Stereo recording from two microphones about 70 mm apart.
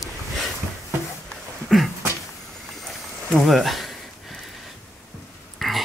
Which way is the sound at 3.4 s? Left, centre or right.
Centre.